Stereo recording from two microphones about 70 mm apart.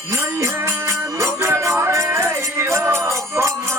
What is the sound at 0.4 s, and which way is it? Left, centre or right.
Music, right.